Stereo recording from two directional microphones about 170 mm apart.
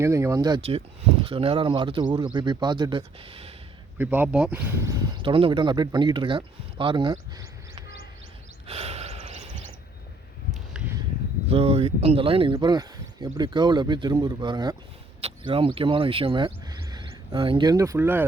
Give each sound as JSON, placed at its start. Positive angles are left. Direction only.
{"t": 0.0, "sound": "speech", "side_deg": -15}
{"t": 1.2, "sound": "a man's voice", "side_deg": -30}
{"t": 3.9, "sound": "speech", "side_deg": -10}
{"t": 5.1, "sound": "speech", "side_deg": -30}
{"t": 8.6, "sound": "gasp", "side_deg": -35}
{"t": 10.8, "sound": "a sound", "side_deg": -5}
{"t": 11.4, "sound": "speech", "side_deg": -35}
{"t": 12.5, "sound": "a man's voice", "side_deg": -20}